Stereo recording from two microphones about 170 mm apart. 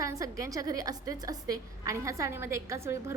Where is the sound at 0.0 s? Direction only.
20° right (ahead or behind).